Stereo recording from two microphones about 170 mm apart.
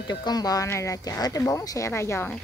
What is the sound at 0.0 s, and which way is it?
Speech, 25° left (ahead or behind).